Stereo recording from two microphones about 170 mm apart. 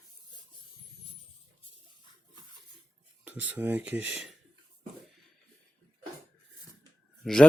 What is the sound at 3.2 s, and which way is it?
Speech, 10° right (ahead or behind).